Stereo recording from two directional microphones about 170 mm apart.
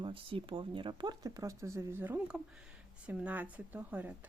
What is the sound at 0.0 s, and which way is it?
Speech, 30° right (ahead or behind).